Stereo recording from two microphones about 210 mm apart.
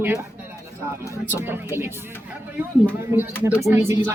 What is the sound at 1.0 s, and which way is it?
Speech, 10° right (ahead or behind).